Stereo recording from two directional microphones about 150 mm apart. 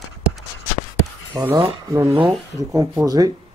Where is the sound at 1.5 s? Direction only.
25° right (ahead or behind).